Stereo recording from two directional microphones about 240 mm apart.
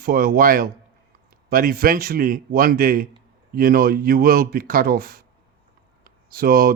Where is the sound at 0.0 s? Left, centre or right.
Right.